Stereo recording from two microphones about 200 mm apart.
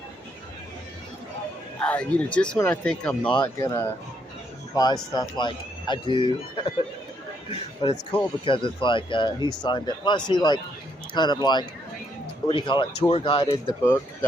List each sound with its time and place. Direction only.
1.8 s speech: 5° left (ahead or behind)
3.2 s speech: 20° left (ahead or behind)
7.8 s speech: 25° left (ahead or behind)